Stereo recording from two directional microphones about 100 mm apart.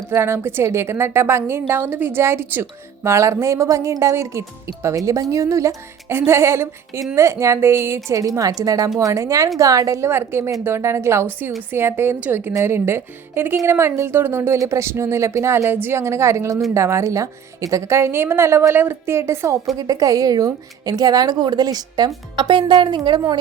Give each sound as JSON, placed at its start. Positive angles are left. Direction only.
{"t": 0.1, "sound": "a woman's voice", "side_deg": -25}